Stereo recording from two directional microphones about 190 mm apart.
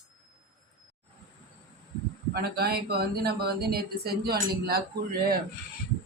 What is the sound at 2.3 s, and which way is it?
Speech, 55° right (ahead or behind).